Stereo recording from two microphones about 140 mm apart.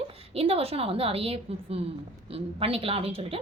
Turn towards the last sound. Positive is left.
turn(degrees=-40)  # may be behind; listen again after turning